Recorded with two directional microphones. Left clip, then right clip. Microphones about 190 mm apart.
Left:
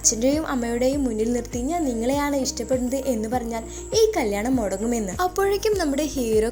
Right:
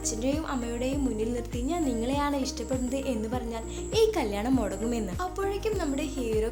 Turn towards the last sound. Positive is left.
turn(degrees=35)  # may be behind; listen again after turning